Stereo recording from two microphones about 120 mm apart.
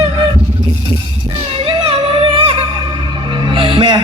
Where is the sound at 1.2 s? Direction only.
45° right (ahead or behind).